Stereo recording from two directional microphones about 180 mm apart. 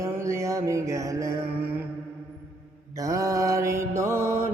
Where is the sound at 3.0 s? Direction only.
20° right (ahead or behind).